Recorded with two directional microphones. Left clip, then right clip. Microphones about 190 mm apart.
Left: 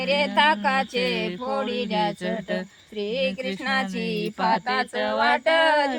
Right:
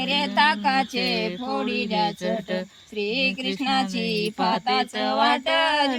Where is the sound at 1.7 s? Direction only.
60° left (ahead or behind).